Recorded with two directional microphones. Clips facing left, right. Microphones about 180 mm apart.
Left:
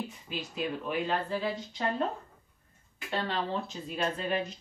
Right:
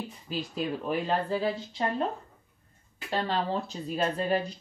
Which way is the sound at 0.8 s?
35° right (ahead or behind).